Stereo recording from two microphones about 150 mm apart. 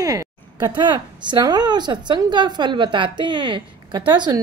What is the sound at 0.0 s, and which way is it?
Speech, 25° right (ahead or behind).